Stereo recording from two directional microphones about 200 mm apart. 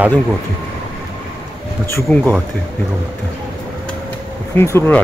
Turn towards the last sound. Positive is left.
turn(degrees=10)  # may be behind; listen again after turning